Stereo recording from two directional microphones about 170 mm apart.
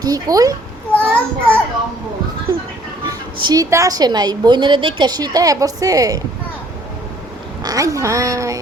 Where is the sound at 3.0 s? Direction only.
25° right (ahead or behind).